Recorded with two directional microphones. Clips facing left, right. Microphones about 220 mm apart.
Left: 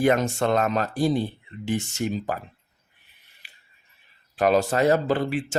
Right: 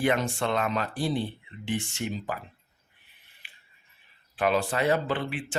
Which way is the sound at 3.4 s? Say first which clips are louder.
Left 1 dB; 40° left (ahead or behind).